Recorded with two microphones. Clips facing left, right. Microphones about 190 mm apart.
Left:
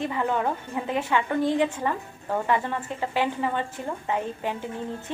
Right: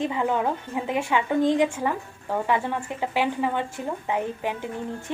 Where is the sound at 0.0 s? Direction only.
15° right (ahead or behind).